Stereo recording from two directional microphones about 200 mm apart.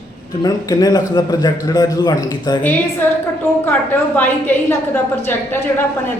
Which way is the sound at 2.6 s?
10° left (ahead or behind).